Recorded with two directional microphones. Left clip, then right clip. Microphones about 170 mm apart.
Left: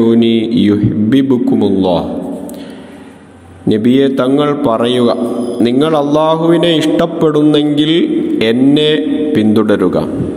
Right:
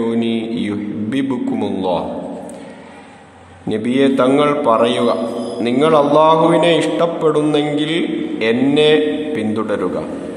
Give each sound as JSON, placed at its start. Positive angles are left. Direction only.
{"t": 0.0, "sound": "mantra", "side_deg": 20}
{"t": 3.6, "sound": "mantra", "side_deg": 20}